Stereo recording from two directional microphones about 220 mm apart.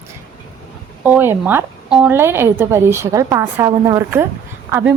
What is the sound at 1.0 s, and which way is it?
A woman's voice, 10° right (ahead or behind).